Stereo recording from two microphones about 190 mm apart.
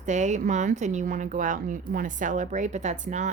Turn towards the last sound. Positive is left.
turn(degrees=-40)  # may be behind; listen again after turning